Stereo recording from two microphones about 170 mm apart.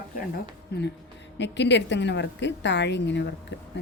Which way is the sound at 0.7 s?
85° left.